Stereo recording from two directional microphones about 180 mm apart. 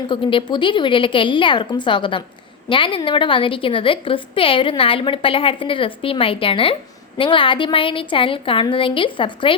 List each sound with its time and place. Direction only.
0.1 s a woman's voice: 30° left (ahead or behind)